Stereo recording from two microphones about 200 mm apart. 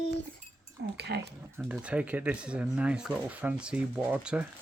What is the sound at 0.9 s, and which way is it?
Speech, 55° right (ahead or behind).